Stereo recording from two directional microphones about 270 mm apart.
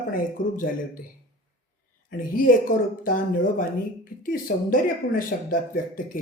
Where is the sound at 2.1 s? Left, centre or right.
Left.